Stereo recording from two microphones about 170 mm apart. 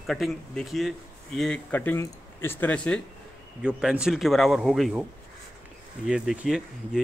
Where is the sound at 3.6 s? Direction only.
5° right (ahead or behind).